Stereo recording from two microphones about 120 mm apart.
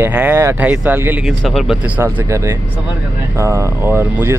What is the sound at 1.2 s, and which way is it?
Speech, centre (ahead or behind).